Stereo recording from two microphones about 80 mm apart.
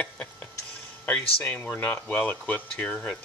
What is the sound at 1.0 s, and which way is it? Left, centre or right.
Speech, centre.